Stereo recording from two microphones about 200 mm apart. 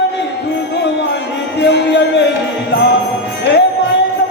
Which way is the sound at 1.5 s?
60° left (ahead or behind).